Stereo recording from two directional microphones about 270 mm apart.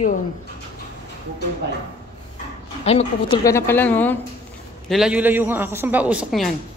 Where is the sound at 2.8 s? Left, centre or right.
Left.